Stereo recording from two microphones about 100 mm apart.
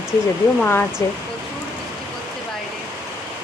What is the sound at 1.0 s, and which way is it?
Speech, 30° left (ahead or behind).